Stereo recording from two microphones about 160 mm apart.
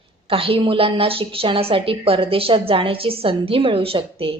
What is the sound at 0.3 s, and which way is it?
A woman's voice, 35° right (ahead or behind).